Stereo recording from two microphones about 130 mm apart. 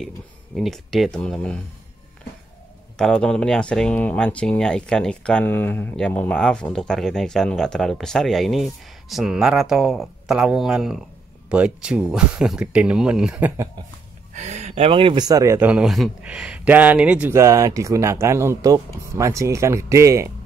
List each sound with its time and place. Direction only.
0.6 s speech: centre (ahead or behind)
3.0 s speech: 5° left (ahead or behind)
14.3 s speech: 60° right (ahead or behind); by 15.7 s 20° right (ahead or behind)
15.7 s speech: 5° right (ahead or behind); by 20.3 s 20° right (ahead or behind)